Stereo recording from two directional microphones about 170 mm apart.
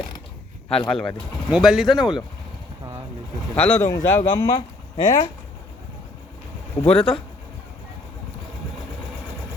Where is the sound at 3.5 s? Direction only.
10° left (ahead or behind).